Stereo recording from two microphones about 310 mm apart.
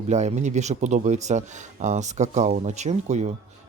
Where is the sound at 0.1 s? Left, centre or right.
Right.